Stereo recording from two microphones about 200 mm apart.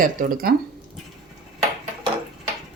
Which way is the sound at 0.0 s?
45° right (ahead or behind).